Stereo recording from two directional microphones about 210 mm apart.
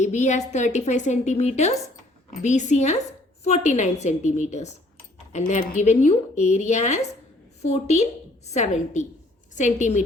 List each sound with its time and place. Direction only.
0.0 s a woman's voice: 35° left (ahead or behind)